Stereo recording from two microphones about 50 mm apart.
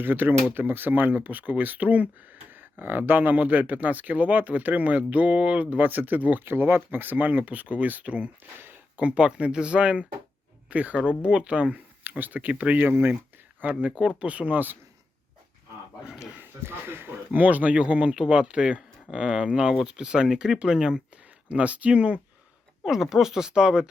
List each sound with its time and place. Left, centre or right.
0.0 s speech: right
2.5 s a sound: right
3.1 s speech: right
5.7 s speech: right
8.5 s a sound: right
9.0 s speech: right
12.8 s speech: right
13.7 s speech: right
16.4 s speech: right; by 21.0 s centre
21.5 s speech: right
22.8 s speech: centre